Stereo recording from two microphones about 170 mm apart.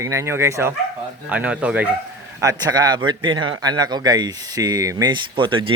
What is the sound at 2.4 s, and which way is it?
A man's voice, 20° right (ahead or behind).